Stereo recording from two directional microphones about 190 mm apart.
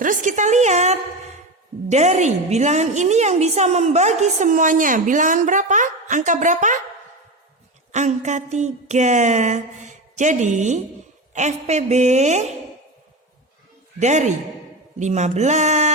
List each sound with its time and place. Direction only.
0.0 s a sound: 45° right (ahead or behind)
1.9 s a woman's voice: 40° right (ahead or behind)
7.9 s a woman's voice: 40° right (ahead or behind)
14.0 s a woman's voice: 40° right (ahead or behind)